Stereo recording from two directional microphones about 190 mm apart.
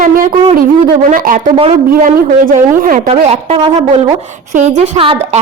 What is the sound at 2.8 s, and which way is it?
Speech, 45° right (ahead or behind).